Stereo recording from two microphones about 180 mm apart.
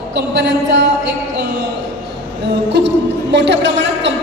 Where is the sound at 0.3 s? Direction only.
75° right (ahead or behind).